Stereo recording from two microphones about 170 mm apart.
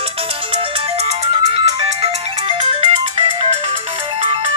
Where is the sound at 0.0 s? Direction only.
35° right (ahead or behind).